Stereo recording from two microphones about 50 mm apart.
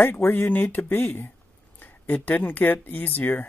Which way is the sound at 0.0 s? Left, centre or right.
Left.